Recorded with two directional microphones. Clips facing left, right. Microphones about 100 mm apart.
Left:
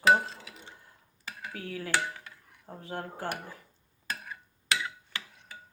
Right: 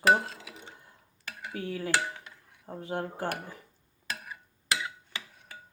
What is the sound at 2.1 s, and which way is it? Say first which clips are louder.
Dishes: even; 20° right (ahead or behind).